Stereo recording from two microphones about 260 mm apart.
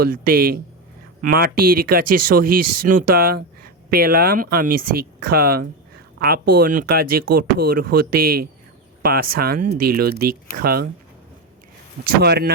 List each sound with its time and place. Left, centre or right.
0.0 s speech: right
9.6 s speech: right
9.9 s speech: right
12.0 s speech: right